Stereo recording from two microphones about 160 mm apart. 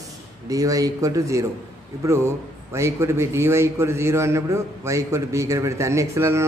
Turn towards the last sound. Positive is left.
turn(degrees=-15)  # may be behind; listen again after turning